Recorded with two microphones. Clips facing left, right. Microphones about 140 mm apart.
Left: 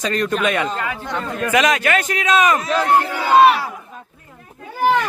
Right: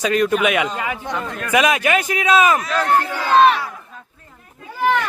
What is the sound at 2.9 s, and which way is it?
Crowd, 15° left (ahead or behind).